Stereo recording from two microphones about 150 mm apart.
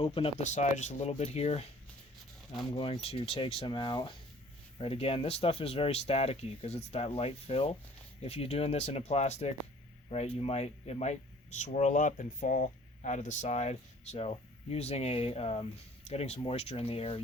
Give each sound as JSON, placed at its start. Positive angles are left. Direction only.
{"t": 0.0, "sound": "speech", "side_deg": 35}
{"t": 2.7, "sound": "speech", "side_deg": 40}